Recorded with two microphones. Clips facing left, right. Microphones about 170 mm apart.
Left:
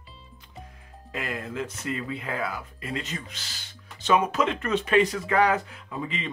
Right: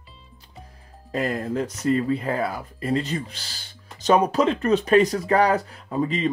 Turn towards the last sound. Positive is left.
turn(degrees=-40)  # may be behind; listen again after turning